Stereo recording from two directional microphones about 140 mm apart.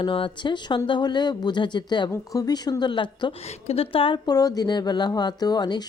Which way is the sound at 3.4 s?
50° left (ahead or behind).